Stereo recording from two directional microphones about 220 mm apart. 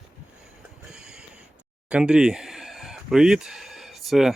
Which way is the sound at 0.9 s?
5° right (ahead or behind).